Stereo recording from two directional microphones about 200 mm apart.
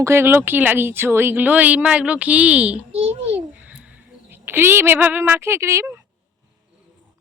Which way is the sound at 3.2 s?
10° right (ahead or behind).